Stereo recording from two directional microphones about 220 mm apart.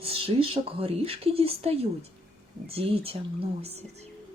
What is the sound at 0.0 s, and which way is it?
Speech, 25° right (ahead or behind).